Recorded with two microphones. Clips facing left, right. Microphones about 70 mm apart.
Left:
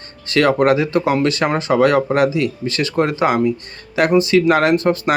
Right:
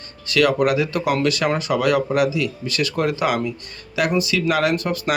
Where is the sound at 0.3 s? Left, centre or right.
Left.